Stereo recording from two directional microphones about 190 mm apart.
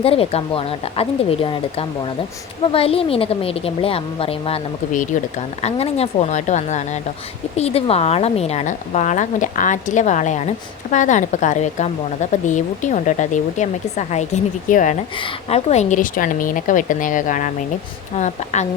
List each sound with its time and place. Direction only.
0.0 s a woman's voice: 30° left (ahead or behind)